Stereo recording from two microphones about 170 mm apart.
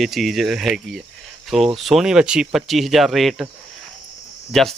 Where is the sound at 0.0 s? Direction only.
Centre (ahead or behind).